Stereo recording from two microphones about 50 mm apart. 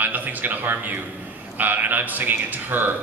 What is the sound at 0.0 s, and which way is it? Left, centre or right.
A man's voice, right.